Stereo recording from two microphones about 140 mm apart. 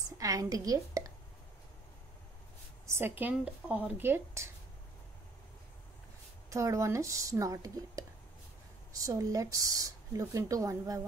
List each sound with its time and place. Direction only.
0.2 s a woman's voice: 25° right (ahead or behind)
2.9 s speech: 15° right (ahead or behind)
6.5 s speech: 20° right (ahead or behind)